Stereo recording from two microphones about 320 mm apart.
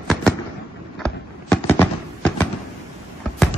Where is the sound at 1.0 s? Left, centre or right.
Centre.